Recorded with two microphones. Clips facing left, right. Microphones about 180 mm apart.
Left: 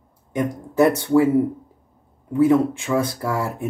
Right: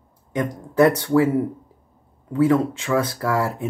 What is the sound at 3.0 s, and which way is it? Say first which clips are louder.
Speech: right 1 dB; 20° left (ahead or behind).